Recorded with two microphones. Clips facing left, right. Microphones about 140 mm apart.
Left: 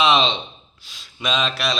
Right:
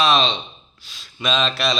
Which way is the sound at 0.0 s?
20° left (ahead or behind).